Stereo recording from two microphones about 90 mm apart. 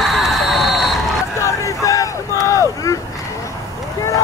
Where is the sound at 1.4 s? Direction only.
35° left (ahead or behind).